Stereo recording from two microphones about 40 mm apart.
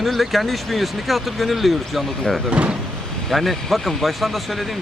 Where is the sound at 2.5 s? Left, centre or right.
Right.